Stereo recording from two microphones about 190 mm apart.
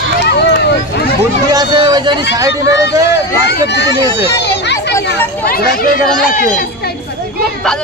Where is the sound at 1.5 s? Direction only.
25° right (ahead or behind).